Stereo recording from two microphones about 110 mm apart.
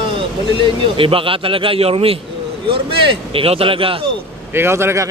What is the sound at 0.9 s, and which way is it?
Speech, 55° right (ahead or behind).